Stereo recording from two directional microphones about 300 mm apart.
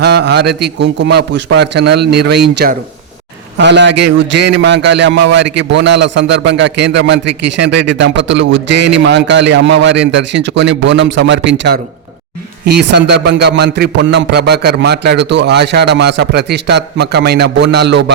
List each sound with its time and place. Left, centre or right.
0.0 s a man's voice: right